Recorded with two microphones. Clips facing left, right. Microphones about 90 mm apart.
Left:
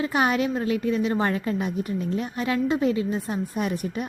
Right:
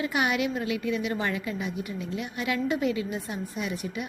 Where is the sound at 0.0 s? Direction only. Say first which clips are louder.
Left 4 dB; 35° left (ahead or behind).